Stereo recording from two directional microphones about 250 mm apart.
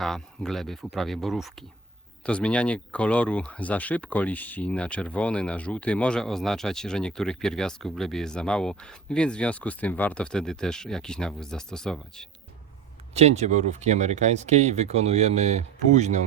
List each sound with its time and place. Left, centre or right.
0.0 s speech: centre
13.1 s speech: right